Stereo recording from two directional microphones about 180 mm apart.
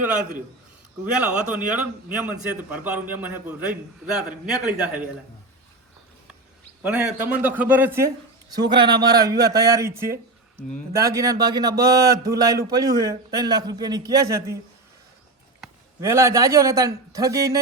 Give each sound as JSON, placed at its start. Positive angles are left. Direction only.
{"t": 1.0, "sound": "a man's voice", "side_deg": -5}
{"t": 6.8, "sound": "a man's voice", "side_deg": -5}
{"t": 8.7, "sound": "a man's voice", "side_deg": -25}
{"t": 16.0, "sound": "a man's voice", "side_deg": -15}